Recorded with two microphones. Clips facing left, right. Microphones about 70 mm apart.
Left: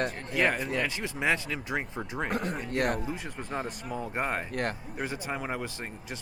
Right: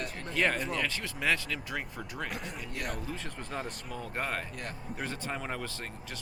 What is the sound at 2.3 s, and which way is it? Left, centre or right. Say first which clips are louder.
Speech: left 9 dB; left.